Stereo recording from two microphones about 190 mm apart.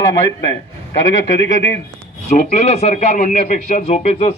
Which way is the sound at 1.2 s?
65° left (ahead or behind).